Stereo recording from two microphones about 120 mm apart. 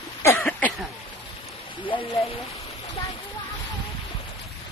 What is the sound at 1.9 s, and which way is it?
Speech, 45° left (ahead or behind).